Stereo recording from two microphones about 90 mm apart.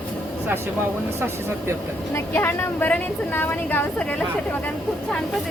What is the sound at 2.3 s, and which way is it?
A woman's voice, 25° left (ahead or behind).